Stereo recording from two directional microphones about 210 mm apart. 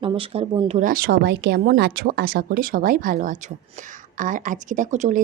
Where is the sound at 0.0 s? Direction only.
25° right (ahead or behind).